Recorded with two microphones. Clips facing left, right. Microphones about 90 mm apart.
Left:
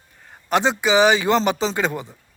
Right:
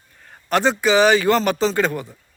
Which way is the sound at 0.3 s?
20° left (ahead or behind).